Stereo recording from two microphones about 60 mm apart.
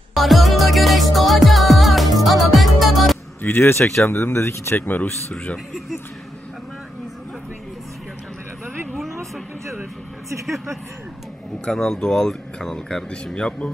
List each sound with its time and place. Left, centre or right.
0.1 s music: centre
3.4 s speech: left
3.8 s speech: centre
4.1 s speech: left
4.8 s speech: left
8.6 s a sound: centre
10.4 s speech: centre
11.6 s speech: centre